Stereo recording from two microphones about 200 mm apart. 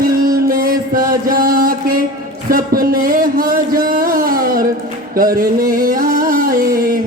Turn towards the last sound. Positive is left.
turn(degrees=-45)  # may be behind; listen again after turning